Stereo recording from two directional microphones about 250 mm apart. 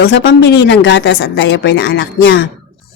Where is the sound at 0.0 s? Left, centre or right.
Left.